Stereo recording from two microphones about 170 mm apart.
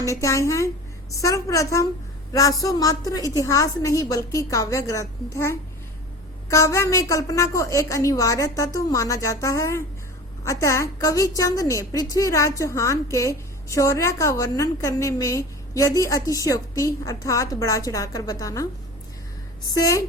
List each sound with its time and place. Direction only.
0.0 s a woman's voice: 20° left (ahead or behind)
19.7 s a woman's voice: 20° left (ahead or behind)